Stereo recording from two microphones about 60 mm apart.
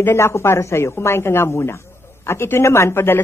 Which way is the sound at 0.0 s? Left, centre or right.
Left.